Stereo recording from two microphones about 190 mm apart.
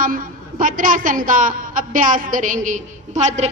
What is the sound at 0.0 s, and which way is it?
A woman's voice, 45° right (ahead or behind).